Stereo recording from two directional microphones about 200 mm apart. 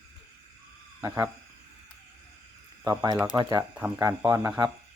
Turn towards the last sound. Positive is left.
turn(degrees=-15)  # may be behind; listen again after turning